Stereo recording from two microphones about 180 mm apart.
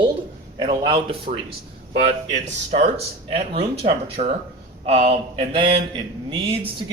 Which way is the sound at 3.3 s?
35° right (ahead or behind).